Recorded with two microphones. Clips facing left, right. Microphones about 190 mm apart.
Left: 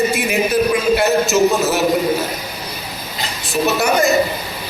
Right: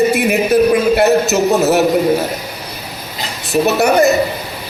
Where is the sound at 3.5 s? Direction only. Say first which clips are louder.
Right 4 dB; 60° right (ahead or behind).